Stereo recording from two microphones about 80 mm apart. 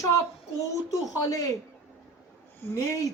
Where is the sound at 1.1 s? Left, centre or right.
Left.